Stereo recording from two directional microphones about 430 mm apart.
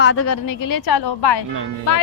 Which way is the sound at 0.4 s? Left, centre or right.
Left.